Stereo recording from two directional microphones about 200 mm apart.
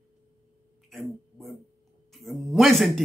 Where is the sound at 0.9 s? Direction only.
Centre (ahead or behind).